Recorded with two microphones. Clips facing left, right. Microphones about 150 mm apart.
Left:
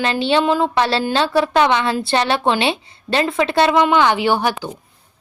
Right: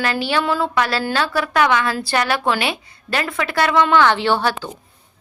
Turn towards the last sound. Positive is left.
turn(degrees=15)  # may be behind; listen again after turning